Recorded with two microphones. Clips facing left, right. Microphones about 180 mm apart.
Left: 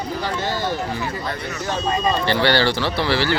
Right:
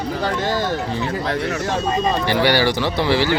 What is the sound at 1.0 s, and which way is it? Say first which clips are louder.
Speech: right 5 dB; 75° right (ahead or behind).